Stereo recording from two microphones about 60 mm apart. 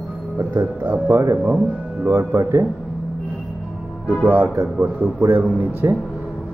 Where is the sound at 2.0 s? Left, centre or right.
Right.